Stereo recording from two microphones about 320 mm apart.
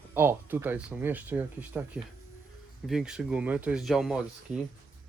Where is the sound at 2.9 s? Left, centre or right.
Centre.